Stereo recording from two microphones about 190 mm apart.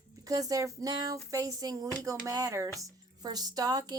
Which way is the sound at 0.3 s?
20° right (ahead or behind).